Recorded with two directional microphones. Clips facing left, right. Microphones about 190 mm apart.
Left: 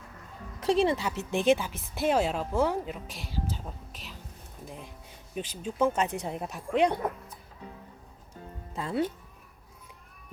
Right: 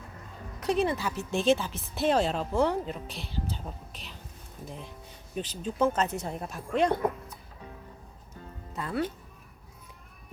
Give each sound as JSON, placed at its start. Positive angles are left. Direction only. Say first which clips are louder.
{"t": 0.8, "sound": "a woman's voice", "louder": "left 1 dB", "side_deg": 25}
{"t": 5.3, "sound": "a woman's voice", "louder": "right 1 dB", "side_deg": 10}
{"t": 8.7, "sound": "speech", "louder": "left 2 dB", "side_deg": 25}